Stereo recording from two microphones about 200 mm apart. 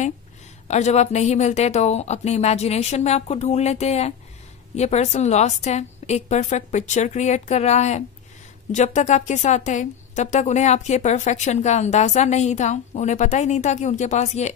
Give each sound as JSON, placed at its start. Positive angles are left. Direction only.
{"t": 0.7, "sound": "a woman's voice", "side_deg": 35}